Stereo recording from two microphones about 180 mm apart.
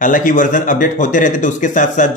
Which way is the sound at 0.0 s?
45° left (ahead or behind).